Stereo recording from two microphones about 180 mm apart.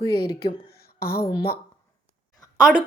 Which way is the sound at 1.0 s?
55° left (ahead or behind).